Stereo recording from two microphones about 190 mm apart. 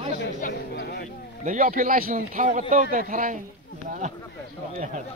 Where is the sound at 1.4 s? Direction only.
40° right (ahead or behind).